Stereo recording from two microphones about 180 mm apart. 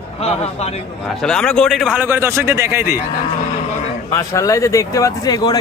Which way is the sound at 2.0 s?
15° right (ahead or behind).